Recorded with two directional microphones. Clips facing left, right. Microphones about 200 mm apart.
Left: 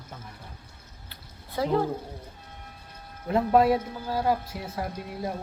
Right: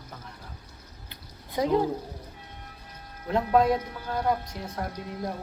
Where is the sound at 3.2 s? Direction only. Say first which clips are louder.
Left 2 dB; 5° left (ahead or behind).